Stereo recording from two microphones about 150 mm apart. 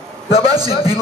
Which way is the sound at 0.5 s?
25° right (ahead or behind).